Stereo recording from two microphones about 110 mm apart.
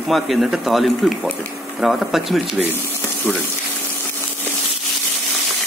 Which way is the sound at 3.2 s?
15° left (ahead or behind).